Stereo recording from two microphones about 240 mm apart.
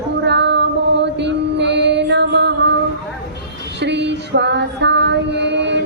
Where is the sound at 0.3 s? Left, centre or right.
Right.